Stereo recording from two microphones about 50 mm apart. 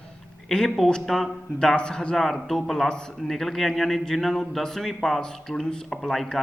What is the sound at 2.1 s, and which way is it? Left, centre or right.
A man's voice, centre.